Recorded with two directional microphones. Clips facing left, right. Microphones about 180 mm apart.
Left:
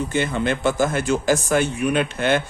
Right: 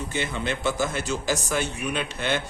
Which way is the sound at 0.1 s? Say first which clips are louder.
Left 7 dB; 50° left (ahead or behind).